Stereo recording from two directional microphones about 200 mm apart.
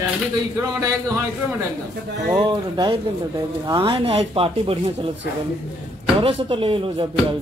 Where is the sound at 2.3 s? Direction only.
20° right (ahead or behind).